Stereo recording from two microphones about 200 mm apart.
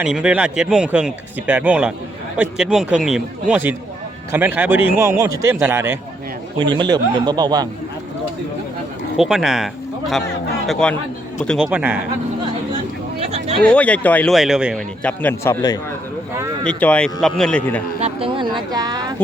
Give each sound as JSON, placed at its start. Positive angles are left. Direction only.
{"t": 0.0, "sound": "speech", "side_deg": -5}
{"t": 6.6, "sound": "a man's voice", "side_deg": -20}
{"t": 9.1, "sound": "a man's voice", "side_deg": 0}
{"t": 13.1, "sound": "a sound", "side_deg": -30}
{"t": 13.6, "sound": "speech", "side_deg": 5}
{"t": 18.0, "sound": "a man's voice", "side_deg": -25}